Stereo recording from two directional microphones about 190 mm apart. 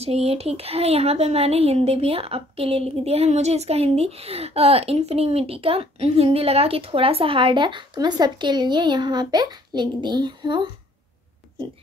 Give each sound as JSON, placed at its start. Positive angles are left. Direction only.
{"t": 0.0, "sound": "speech", "side_deg": -35}